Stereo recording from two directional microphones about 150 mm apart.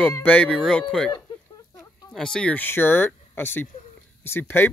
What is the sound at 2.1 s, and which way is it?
Speech, 5° left (ahead or behind).